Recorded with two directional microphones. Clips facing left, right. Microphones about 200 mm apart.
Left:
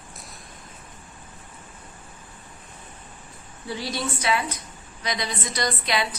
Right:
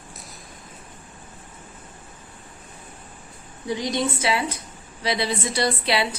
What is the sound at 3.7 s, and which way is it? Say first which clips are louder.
A woman's voice: right 5 dB; 20° right (ahead or behind).